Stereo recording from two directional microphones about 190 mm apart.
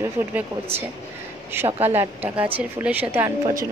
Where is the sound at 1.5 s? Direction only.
10° right (ahead or behind).